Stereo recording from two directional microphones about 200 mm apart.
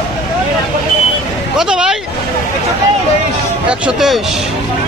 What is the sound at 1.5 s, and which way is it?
Speech, 5° right (ahead or behind).